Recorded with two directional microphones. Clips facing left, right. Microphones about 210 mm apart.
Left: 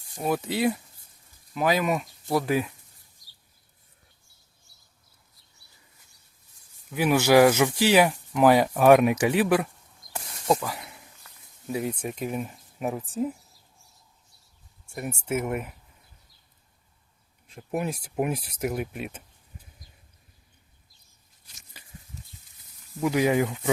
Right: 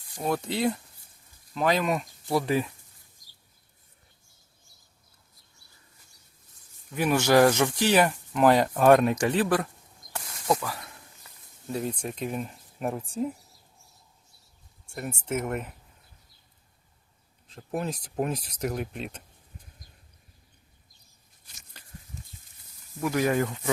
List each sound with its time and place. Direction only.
0.2 s speech: 5° left (ahead or behind)
6.9 s speech: 10° left (ahead or behind)
14.8 s speech: 10° left (ahead or behind)
17.5 s speech: 10° left (ahead or behind)
22.1 s goat: 40° right (ahead or behind)
23.0 s speech: 15° left (ahead or behind)